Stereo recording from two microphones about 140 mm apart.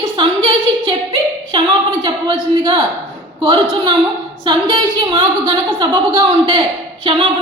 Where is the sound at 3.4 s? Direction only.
35° right (ahead or behind).